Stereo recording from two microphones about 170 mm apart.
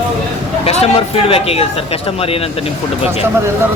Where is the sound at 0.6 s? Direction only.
35° left (ahead or behind).